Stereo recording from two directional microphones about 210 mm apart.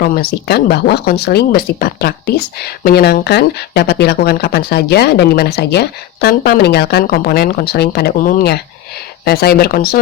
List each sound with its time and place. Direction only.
0.0 s speech: 45° left (ahead or behind)